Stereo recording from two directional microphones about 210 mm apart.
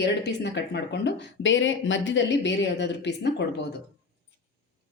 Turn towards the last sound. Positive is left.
turn(degrees=55)  # may be behind; listen again after turning